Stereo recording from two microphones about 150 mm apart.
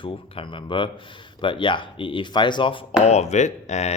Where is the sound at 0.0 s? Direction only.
35° left (ahead or behind).